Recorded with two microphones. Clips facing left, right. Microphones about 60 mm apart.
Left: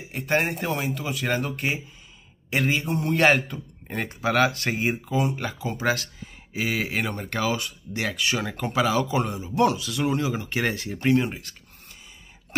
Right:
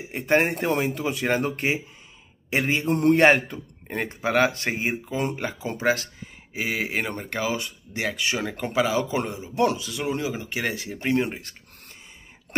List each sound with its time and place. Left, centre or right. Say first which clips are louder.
0.1 s speech: right 3 dB; centre
2.9 s a sound: right 6 dB; right
3.2 s speech: left 1 dB; right
3.8 s speech: even; centre
11.1 s speech: even; right